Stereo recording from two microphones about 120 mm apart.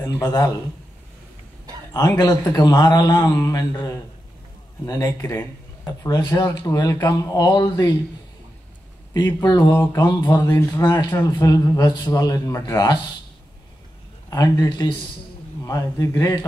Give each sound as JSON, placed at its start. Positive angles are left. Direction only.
{"t": 0.2, "sound": "speech", "side_deg": 35}
{"t": 2.0, "sound": "speech", "side_deg": 30}
{"t": 9.1, "sound": "speech", "side_deg": 30}
{"t": 14.3, "sound": "speech", "side_deg": 30}